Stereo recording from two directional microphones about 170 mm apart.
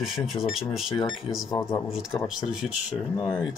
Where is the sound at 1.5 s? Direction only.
15° left (ahead or behind).